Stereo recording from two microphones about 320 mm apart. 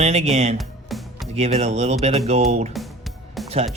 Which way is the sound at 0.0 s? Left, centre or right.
Centre.